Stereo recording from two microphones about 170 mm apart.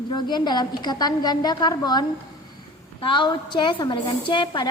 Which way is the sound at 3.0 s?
30° left (ahead or behind).